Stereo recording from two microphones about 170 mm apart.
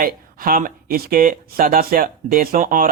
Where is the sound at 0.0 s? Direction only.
60° right (ahead or behind).